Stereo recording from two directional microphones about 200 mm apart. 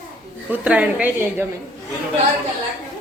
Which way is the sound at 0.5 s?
5° right (ahead or behind).